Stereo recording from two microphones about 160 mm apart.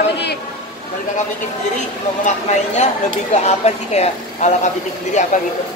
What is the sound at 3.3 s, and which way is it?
Speech, 45° left (ahead or behind).